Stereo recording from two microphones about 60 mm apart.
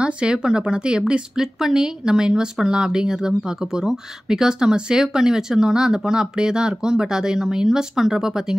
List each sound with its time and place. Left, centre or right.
0.0 s speech: centre